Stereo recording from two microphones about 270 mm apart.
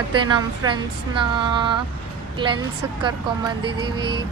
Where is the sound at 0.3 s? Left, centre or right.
Centre.